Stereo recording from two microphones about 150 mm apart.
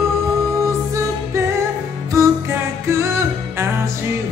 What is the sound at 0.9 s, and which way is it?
Music, 20° right (ahead or behind).